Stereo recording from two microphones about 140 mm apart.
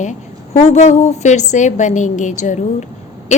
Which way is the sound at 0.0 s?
55° left (ahead or behind).